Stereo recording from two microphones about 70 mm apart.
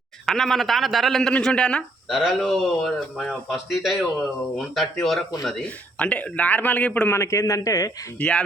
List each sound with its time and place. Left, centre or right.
0.3 s a man's voice: centre
2.0 s speech: centre
5.6 s a man's voice: centre
7.1 s a man's voice: left
8.2 s a man's voice: left